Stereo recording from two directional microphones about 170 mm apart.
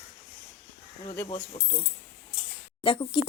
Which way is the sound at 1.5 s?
25° left (ahead or behind).